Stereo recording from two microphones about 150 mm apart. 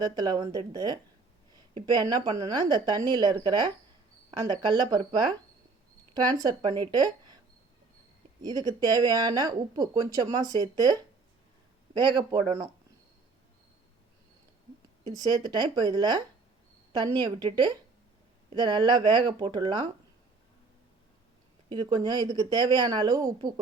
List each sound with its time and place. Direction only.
0.0 s speech: 25° right (ahead or behind)
8.4 s speech: 25° right (ahead or behind)
15.1 s speech: 25° right (ahead or behind)
21.7 s speech: 30° right (ahead or behind)